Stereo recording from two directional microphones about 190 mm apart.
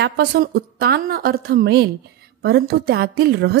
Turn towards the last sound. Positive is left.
turn(degrees=-55)  # may be behind; listen again after turning